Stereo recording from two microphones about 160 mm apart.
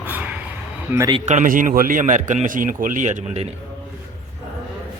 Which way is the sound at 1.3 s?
55° right (ahead or behind).